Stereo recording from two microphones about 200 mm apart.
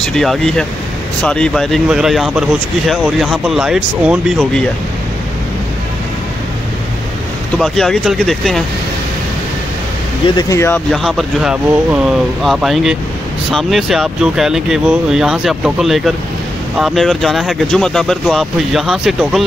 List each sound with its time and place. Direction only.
0.0 s speech: centre (ahead or behind)
7.5 s speech: centre (ahead or behind)
10.2 s speech: 20° left (ahead or behind)
10.9 s speech: centre (ahead or behind)